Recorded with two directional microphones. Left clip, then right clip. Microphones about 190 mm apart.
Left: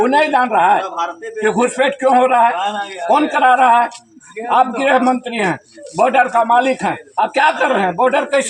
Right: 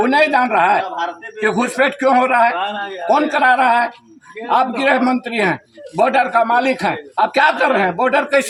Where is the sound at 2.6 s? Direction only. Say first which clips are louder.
Left 2 dB; 25° left (ahead or behind).